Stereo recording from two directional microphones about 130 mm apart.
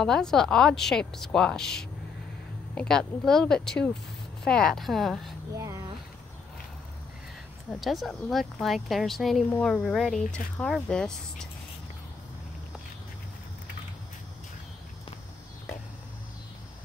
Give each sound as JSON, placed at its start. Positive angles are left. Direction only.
{"t": 0.0, "sound": "speech", "side_deg": 5}
{"t": 5.5, "sound": "a sound", "side_deg": -25}
{"t": 7.8, "sound": "speech", "side_deg": 0}